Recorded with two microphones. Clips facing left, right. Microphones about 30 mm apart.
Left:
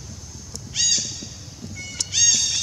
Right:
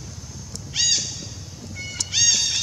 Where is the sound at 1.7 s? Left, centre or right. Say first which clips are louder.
Right 1 dB; centre.